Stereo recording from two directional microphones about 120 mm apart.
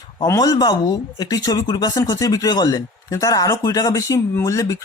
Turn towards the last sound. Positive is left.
turn(degrees=25)  # may be behind; listen again after turning